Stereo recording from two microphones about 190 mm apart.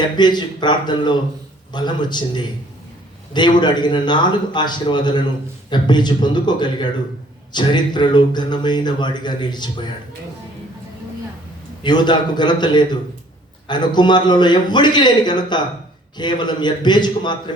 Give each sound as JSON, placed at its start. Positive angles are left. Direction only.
{"t": 0.0, "sound": "speech", "side_deg": 25}
{"t": 11.8, "sound": "speech", "side_deg": 25}